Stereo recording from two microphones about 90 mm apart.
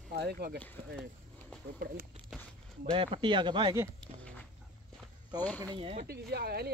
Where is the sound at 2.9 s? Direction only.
80° right; by 3.8 s 60° right (ahead or behind).